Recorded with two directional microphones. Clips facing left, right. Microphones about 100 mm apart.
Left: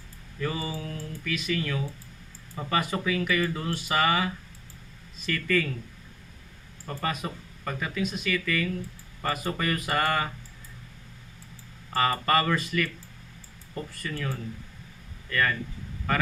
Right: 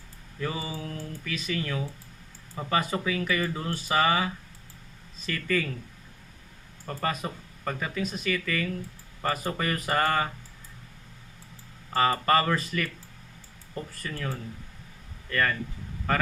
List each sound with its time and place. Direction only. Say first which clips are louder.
0.4 s speech: left 1 dB; 25° right (ahead or behind)
6.8 s speech: right 1 dB; 35° right (ahead or behind)
11.9 s speech: right 1 dB; 30° right (ahead or behind)
14.0 s speech: left 2 dB; 35° right (ahead or behind)